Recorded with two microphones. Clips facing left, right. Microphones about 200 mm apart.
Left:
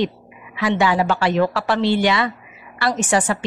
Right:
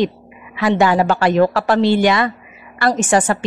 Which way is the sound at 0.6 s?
50° right (ahead or behind).